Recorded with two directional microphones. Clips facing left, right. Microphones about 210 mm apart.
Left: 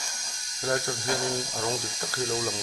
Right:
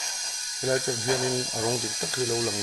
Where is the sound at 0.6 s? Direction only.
15° right (ahead or behind).